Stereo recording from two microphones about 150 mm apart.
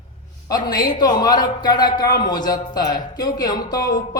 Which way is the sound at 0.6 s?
30° left (ahead or behind).